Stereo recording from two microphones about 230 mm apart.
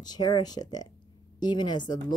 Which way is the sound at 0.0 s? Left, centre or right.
Centre.